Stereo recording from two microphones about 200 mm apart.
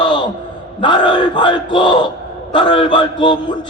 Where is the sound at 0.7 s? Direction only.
25° left (ahead or behind).